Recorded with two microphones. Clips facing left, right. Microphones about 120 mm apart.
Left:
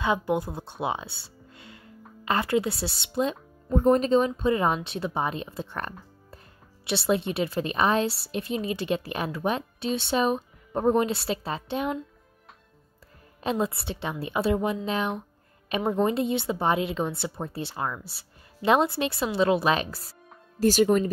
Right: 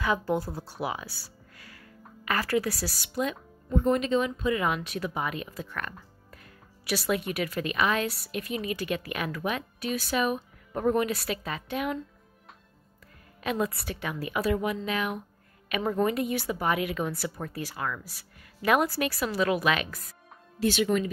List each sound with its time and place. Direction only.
0.0 s a woman's voice: 20° left (ahead or behind)
3.7 s a woman's voice: 40° left (ahead or behind)
13.4 s a woman's voice: 30° left (ahead or behind)